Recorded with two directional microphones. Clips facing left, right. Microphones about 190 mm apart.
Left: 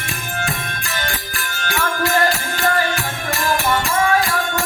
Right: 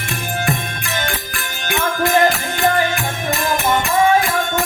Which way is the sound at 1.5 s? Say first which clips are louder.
Right 2 dB; 20° right (ahead or behind).